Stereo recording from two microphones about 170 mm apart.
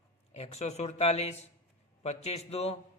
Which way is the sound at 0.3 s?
40° left (ahead or behind).